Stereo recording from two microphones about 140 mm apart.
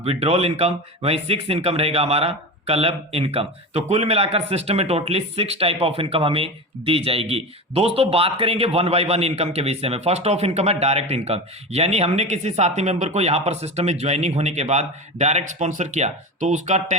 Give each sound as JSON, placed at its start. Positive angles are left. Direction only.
{"t": 0.0, "sound": "speech", "side_deg": -45}